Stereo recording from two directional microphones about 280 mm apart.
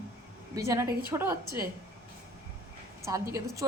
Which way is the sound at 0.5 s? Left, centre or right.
Centre.